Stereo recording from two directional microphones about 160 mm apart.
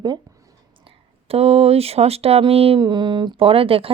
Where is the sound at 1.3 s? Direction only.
40° right (ahead or behind).